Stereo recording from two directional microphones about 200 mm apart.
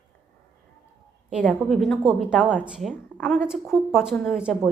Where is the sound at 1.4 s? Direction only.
5° left (ahead or behind).